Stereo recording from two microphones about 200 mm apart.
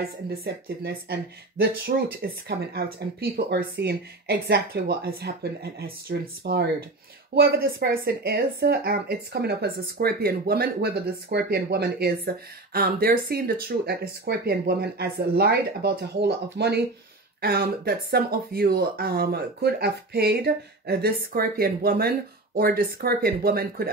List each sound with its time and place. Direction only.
0.3 s speech: 50° right (ahead or behind)